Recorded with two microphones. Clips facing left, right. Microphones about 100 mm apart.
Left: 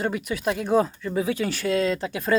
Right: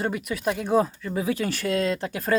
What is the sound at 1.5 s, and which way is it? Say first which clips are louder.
Speech: left 1 dB; centre (ahead or behind).